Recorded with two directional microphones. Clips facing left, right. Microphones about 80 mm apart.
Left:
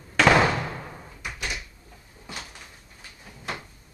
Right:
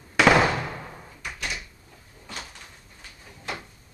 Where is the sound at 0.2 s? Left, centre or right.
Centre.